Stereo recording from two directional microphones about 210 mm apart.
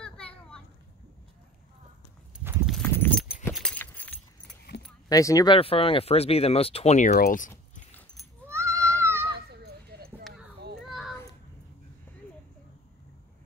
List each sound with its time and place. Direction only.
0.0 s children playing: 5° left (ahead or behind)
2.4 s clip-clop: centre (ahead or behind)
2.9 s horse: 10° left (ahead or behind)
3.5 s keys jangling: 5° left (ahead or behind)
5.1 s speech: 15° left (ahead or behind); by 7.8 s 40° left (ahead or behind)
8.5 s goat: 15° right (ahead or behind)
9.5 s a sound: 50° right (ahead or behind)
10.9 s a sound: centre (ahead or behind)